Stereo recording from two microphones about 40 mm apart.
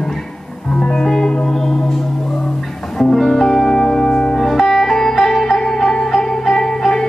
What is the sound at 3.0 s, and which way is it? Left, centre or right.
Music, centre.